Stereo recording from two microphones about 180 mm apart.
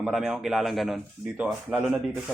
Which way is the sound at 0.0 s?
Centre (ahead or behind).